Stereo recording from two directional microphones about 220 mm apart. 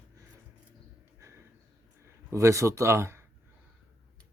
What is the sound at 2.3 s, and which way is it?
Speech, 15° right (ahead or behind).